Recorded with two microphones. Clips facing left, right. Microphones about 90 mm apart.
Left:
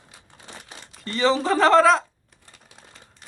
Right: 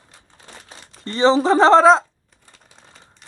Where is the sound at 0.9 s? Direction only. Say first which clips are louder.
Right 5 dB; 30° right (ahead or behind).